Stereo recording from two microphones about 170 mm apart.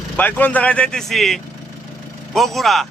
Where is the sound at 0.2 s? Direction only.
10° left (ahead or behind).